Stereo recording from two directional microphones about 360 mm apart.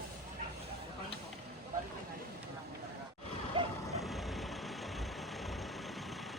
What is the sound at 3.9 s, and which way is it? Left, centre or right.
Vehicle, centre.